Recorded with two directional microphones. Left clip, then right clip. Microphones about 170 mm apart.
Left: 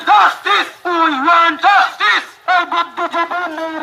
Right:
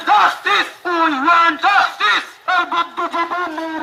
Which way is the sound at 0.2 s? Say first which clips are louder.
Left 2 dB; 35° right (ahead or behind).